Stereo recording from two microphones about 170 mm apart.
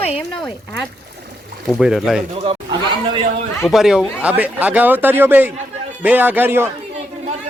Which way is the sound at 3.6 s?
Centre (ahead or behind).